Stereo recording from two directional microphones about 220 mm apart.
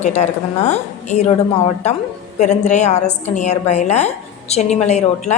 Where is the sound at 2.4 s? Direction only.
30° left (ahead or behind).